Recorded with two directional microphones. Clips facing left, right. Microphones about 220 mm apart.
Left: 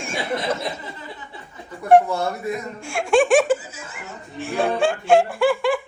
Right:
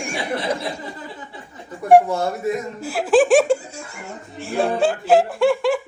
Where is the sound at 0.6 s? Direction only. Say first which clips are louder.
Right 1 dB; 30° right (ahead or behind).